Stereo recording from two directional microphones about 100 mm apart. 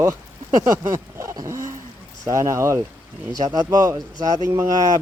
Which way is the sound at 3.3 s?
40° right (ahead or behind).